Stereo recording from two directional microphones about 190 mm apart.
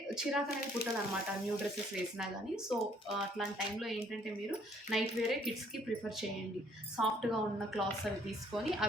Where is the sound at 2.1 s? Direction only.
5° right (ahead or behind).